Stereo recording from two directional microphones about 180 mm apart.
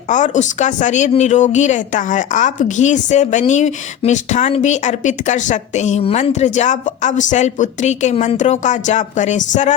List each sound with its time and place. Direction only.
0.1 s speech: 45° left (ahead or behind)